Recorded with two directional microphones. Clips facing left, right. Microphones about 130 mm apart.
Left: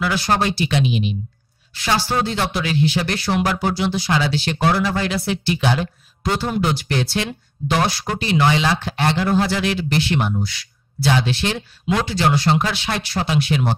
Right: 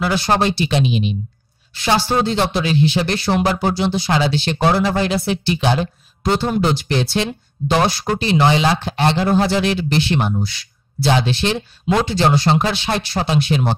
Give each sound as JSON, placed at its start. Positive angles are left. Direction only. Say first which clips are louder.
{"t": 0.0, "sound": "speech", "louder": "right 2 dB", "side_deg": -25}